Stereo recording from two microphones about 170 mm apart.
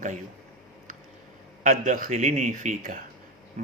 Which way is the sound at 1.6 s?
50° right (ahead or behind).